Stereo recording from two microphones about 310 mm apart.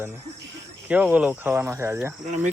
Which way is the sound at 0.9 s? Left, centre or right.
Centre.